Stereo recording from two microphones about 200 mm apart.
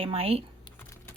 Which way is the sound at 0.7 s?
15° left (ahead or behind).